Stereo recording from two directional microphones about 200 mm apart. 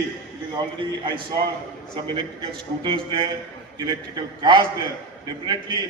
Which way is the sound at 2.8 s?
25° right (ahead or behind).